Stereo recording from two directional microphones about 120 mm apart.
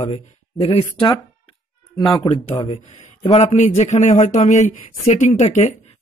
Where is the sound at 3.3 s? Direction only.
80° left.